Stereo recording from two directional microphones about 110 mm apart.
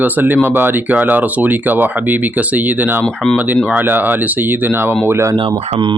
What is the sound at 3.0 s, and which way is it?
Speech, 10° left (ahead or behind).